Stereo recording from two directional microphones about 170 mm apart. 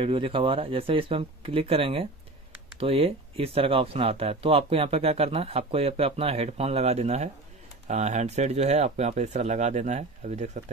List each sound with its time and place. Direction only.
0.0 s speech: 30° right (ahead or behind)